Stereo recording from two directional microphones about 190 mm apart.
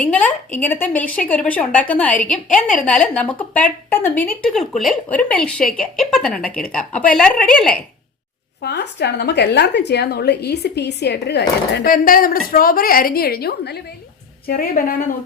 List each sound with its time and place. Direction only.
0.0 s a woman's voice: 5° left (ahead or behind)
8.6 s a woman's voice: 60° left (ahead or behind)